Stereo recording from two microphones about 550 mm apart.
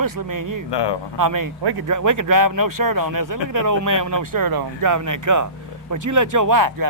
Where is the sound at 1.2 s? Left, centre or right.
Right.